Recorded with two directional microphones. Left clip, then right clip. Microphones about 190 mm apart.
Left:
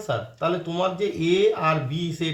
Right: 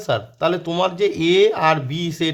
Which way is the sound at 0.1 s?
40° right (ahead or behind).